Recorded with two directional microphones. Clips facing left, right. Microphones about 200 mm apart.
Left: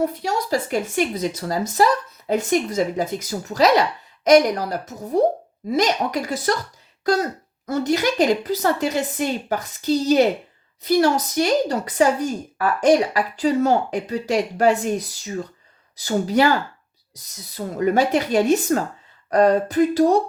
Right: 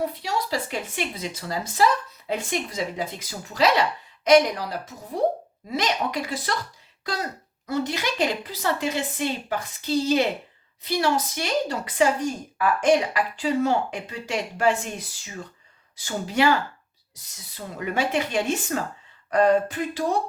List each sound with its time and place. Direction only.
0.0 s speech: 45° left (ahead or behind)
17.7 s speech: 40° left (ahead or behind)